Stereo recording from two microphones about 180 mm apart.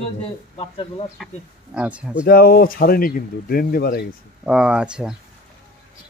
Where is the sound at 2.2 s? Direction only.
55° left (ahead or behind).